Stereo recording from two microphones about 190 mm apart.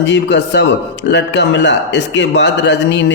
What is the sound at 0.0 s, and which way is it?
Speech, 70° left (ahead or behind).